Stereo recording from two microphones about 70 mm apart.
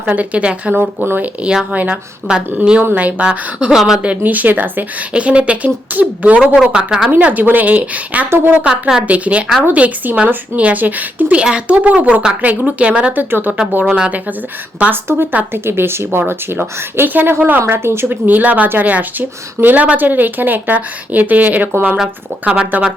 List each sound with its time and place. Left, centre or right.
0.0 s speech: right
2.3 s speech: centre
3.8 s speech: centre
4.0 s speech: right
6.6 s speech: centre
7.1 s speech: right
13.3 s speech: right
13.8 s speech: centre
15.0 s speech: right